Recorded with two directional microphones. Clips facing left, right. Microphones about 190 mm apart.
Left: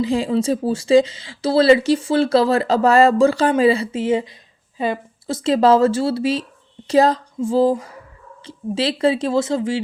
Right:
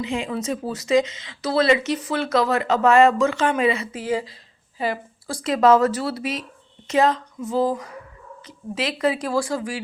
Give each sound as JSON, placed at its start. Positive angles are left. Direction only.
{"t": 0.0, "sound": "speech", "side_deg": 35}